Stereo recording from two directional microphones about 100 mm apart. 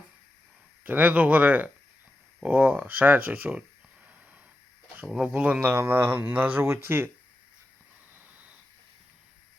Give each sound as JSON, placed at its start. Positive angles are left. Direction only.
{"t": 0.9, "sound": "speech", "side_deg": -15}
{"t": 5.0, "sound": "speech", "side_deg": -5}
{"t": 8.1, "sound": "a sound", "side_deg": -15}